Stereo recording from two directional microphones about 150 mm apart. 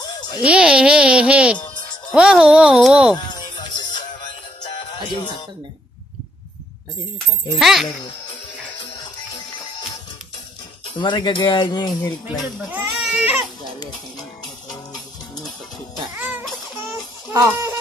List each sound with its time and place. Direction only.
0.0 s a sound: 25° left (ahead or behind)
0.4 s speech: 5° right (ahead or behind)
3.2 s music: 30° left (ahead or behind)
7.5 s a child's voice: centre (ahead or behind)
11.0 s speech: 30° left (ahead or behind)
12.7 s speech: 10° right (ahead or behind)
13.7 s speech: 25° left (ahead or behind)
16.2 s music: 10° right (ahead or behind)
17.3 s chicken: 20° right (ahead or behind)